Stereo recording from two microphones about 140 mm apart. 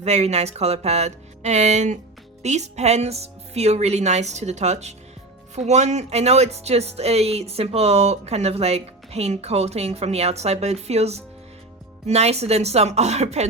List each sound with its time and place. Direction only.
0.0 s speech: 50° right (ahead or behind)